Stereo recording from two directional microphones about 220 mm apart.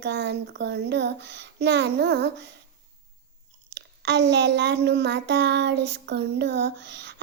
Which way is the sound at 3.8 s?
50° right (ahead or behind).